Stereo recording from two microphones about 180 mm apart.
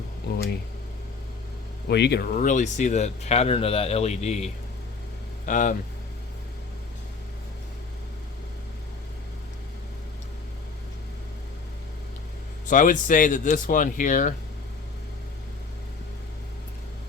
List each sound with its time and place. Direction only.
0.3 s speech: 65° left (ahead or behind)
1.9 s speech: 70° left (ahead or behind)
2.3 s speech: 45° left (ahead or behind)
12.6 s speech: 45° left (ahead or behind)